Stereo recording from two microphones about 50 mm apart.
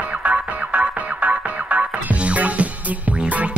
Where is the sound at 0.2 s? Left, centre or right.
Right.